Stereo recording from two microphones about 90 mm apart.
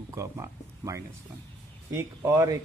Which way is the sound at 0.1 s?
35° right (ahead or behind).